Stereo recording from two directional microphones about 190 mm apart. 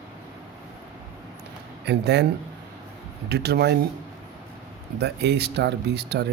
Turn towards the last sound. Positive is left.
turn(degrees=-60)  # may be behind; listen again after turning